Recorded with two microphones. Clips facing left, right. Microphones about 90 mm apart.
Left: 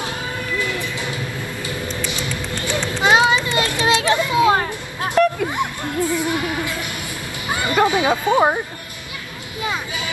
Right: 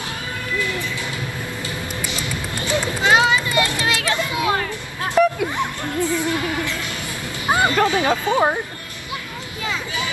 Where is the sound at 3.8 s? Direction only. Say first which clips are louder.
Left 5 dB; 25° left (ahead or behind).